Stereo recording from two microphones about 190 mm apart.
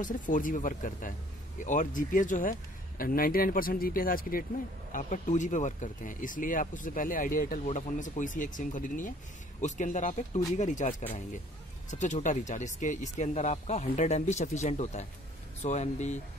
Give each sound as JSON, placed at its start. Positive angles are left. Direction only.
{"t": 0.0, "sound": "speech", "side_deg": 45}